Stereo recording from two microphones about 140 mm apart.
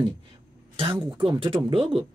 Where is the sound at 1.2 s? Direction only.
35° right (ahead or behind).